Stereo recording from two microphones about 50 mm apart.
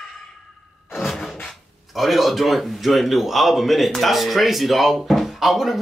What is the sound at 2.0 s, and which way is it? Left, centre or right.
A man's voice, centre.